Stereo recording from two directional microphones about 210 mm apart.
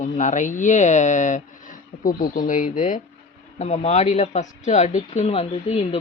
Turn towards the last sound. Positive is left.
turn(degrees=25)  # may be behind; listen again after turning